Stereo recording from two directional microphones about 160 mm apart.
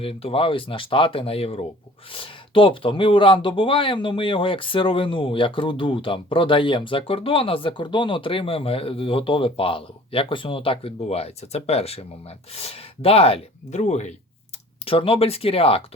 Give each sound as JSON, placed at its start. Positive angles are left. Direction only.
{"t": 0.0, "sound": "speech", "side_deg": 35}